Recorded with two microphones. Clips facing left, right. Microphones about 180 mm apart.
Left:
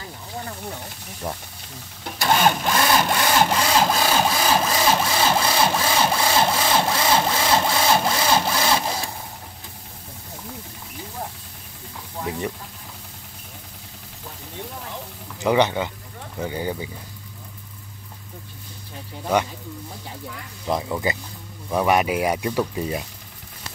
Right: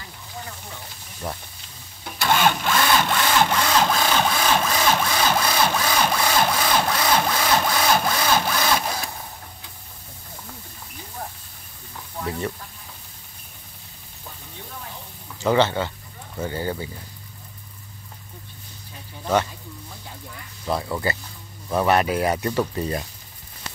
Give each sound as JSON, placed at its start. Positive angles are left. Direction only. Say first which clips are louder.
{"t": 2.2, "sound": "a sound", "louder": "left 1 dB", "side_deg": 15}
{"t": 3.0, "sound": "a sound", "louder": "left 1 dB", "side_deg": 40}
{"t": 4.1, "sound": "wood", "louder": "left 1 dB", "side_deg": 30}
{"t": 12.2, "sound": "sizzle", "louder": "even", "side_deg": 15}
{"t": 15.4, "sound": "speech", "louder": "even", "side_deg": 15}
{"t": 20.6, "sound": "speech", "louder": "left 1 dB", "side_deg": 15}